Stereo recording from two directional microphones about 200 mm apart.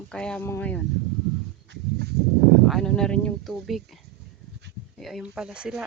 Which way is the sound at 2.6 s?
5° left (ahead or behind).